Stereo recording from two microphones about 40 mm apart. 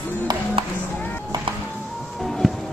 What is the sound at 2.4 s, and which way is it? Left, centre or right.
Music, centre.